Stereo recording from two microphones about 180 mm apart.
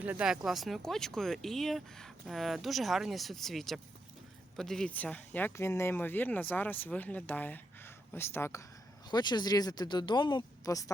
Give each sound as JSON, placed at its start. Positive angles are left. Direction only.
{"t": 0.0, "sound": "speech", "side_deg": -5}
{"t": 9.0, "sound": "speech", "side_deg": 25}